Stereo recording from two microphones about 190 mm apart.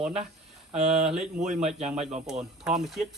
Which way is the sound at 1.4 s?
35° right (ahead or behind).